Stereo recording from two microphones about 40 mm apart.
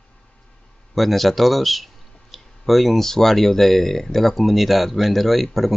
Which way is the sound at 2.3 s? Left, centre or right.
Centre.